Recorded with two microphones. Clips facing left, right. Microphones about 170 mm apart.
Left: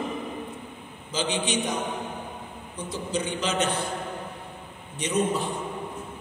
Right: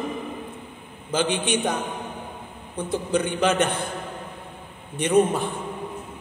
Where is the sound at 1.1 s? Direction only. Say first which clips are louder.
Right 4 dB; 55° right (ahead or behind).